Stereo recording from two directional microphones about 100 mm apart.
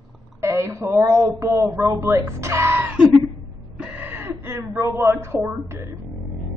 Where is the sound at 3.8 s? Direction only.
20° right (ahead or behind).